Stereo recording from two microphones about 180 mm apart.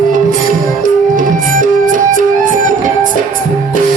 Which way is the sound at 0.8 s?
50° right (ahead or behind).